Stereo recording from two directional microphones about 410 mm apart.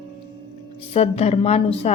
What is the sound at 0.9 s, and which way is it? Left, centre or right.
A woman's voice, centre.